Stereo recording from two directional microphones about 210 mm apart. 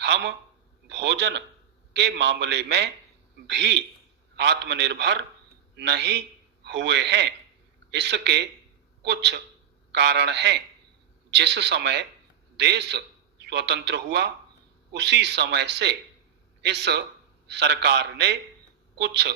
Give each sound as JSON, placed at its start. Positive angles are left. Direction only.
{"t": 0.0, "sound": "a man's voice", "side_deg": -55}